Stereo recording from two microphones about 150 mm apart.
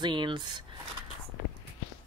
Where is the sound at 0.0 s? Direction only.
30° right (ahead or behind).